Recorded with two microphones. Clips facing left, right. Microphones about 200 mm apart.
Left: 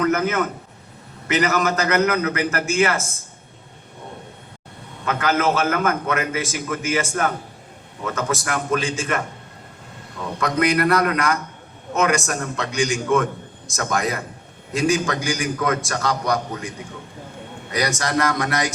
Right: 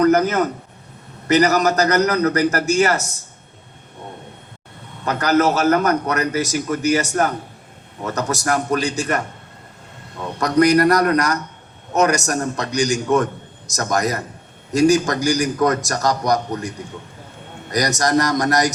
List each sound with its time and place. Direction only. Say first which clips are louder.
0.0 s a sound: right 5 dB; 35° right (ahead or behind)
1.3 s a man's voice: right 5 dB; 40° right (ahead or behind)
5.0 s a man's voice: right 4 dB; 40° right (ahead or behind)
10.4 s a man's voice: right 5 dB; 40° right (ahead or behind)
17.7 s a man's voice: right 4 dB; 40° right (ahead or behind)